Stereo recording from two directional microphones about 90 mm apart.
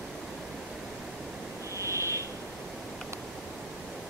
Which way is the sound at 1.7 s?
30° right (ahead or behind).